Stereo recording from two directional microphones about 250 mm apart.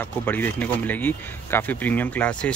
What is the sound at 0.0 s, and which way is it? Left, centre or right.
Speech, centre.